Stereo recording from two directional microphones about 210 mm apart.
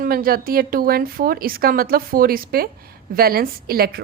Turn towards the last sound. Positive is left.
turn(degrees=-45)  # may be behind; listen again after turning